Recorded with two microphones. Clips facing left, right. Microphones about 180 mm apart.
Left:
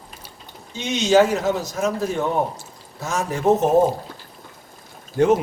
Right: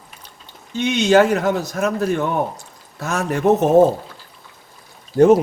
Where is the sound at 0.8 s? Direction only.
55° right (ahead or behind).